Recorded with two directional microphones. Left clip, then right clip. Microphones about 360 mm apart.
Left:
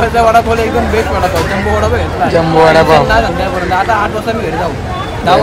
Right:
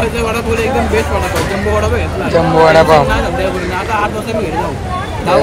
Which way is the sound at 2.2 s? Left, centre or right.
Centre.